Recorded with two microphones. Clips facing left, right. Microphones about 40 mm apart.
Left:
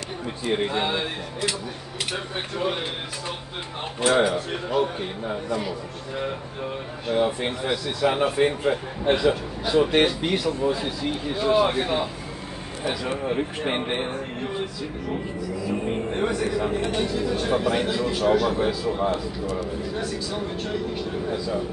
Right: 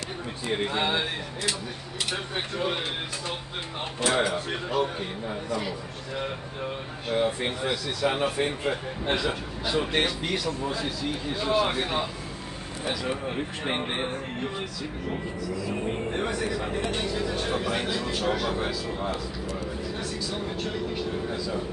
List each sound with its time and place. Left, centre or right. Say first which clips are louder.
0.5 s a man's voice: left 2 dB; centre
2.3 s a man's voice: left 2 dB; centre
4.0 s speech: left 5 dB; centre
5.6 s a man's voice: left 3 dB; centre
9.9 s a man's voice: left 5 dB; centre
15.7 s a man's voice: left 4 dB; centre